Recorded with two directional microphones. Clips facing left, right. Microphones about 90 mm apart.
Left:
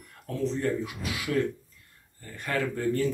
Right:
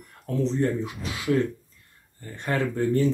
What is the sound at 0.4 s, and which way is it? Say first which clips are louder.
Speech: right 3 dB; 30° right (ahead or behind).